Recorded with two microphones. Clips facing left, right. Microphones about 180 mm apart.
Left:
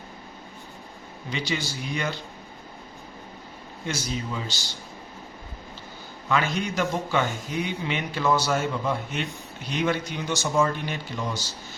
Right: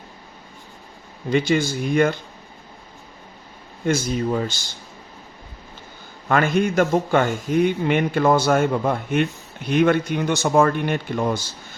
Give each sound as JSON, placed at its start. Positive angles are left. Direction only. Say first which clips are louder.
{"t": 1.3, "sound": "speech", "louder": "right 11 dB", "side_deg": -50}
{"t": 3.8, "sound": "speech", "louder": "right 10 dB", "side_deg": -50}
{"t": 6.2, "sound": "speech", "louder": "right 7 dB", "side_deg": -50}